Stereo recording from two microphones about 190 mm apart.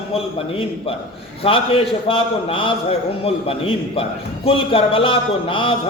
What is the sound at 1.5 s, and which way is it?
A man's voice, 30° left (ahead or behind).